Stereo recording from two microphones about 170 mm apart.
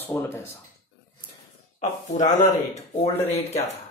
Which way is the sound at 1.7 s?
45° left (ahead or behind).